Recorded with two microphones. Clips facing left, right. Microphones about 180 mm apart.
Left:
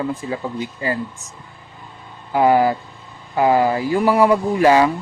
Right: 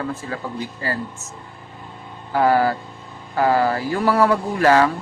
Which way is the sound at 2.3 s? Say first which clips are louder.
Left 2 dB; 15° left (ahead or behind).